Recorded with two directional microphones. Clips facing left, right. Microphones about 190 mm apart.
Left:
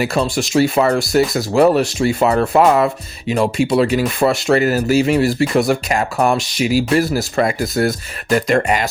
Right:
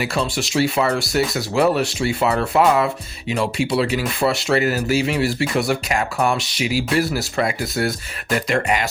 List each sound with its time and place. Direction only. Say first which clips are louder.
0.0 s speech: left 5 dB; 45° left (ahead or behind)